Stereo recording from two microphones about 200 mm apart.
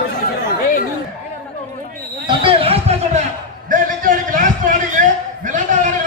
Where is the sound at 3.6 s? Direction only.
40° right (ahead or behind).